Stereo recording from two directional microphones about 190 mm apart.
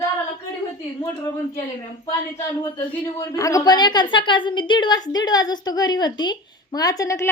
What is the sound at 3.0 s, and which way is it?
A woman's voice, 15° left (ahead or behind).